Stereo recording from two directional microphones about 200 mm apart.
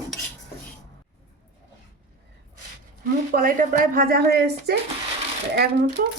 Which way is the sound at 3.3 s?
45° right (ahead or behind).